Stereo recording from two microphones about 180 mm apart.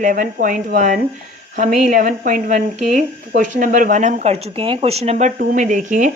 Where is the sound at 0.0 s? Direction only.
50° right (ahead or behind).